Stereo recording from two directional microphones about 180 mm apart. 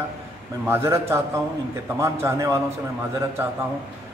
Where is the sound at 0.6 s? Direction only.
15° right (ahead or behind).